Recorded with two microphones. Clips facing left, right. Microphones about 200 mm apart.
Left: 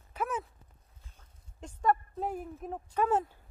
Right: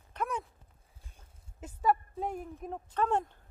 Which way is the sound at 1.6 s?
5° right (ahead or behind).